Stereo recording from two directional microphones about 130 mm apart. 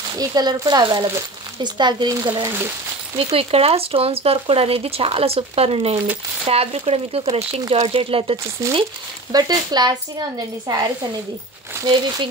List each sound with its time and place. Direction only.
0.2 s speech: 30° right (ahead or behind)
3.2 s speech: 45° right (ahead or behind)
9.3 s speech: 30° right (ahead or behind)